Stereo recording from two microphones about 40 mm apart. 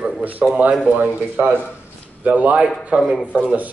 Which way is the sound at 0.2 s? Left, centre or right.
Right.